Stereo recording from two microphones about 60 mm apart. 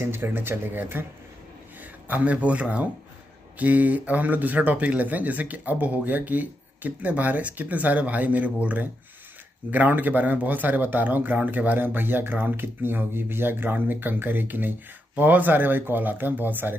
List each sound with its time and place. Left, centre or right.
0.0 s speech: right